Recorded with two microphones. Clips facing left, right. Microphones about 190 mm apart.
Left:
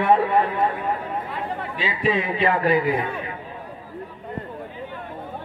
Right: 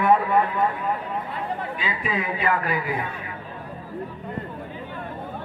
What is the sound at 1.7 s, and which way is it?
A man's voice, 30° left (ahead or behind).